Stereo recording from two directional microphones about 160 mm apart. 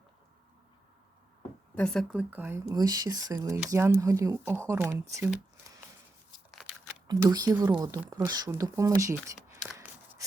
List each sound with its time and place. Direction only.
1.7 s speech: 5° left (ahead or behind); by 5.0 s 20° right (ahead or behind)
7.1 s speech: 25° right (ahead or behind)
9.8 s a sound: 10° right (ahead or behind)